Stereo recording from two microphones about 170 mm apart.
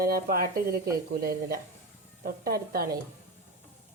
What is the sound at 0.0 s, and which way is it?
Speech, 60° right (ahead or behind).